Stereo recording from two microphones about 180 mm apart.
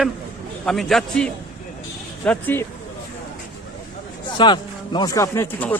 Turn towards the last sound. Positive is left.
turn(degrees=10)  # may be behind; listen again after turning